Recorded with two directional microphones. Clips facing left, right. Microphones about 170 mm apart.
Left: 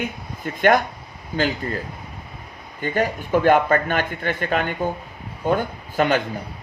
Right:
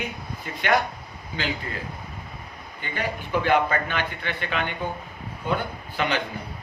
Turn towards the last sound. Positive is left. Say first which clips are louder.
# left 6 dB
turn(degrees=45)  # may be behind; listen again after turning